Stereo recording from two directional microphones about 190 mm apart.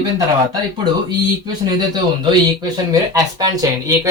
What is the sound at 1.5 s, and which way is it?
Speech, 20° right (ahead or behind).